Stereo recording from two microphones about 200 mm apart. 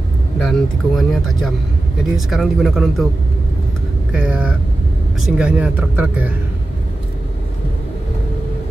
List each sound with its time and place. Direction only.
0.4 s speech: centre (ahead or behind)
4.1 s speech: 5° right (ahead or behind)